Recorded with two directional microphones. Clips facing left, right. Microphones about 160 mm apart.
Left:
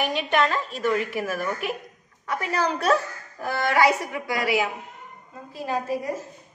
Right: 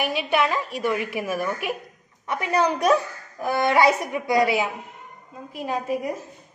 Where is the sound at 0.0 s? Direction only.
10° right (ahead or behind).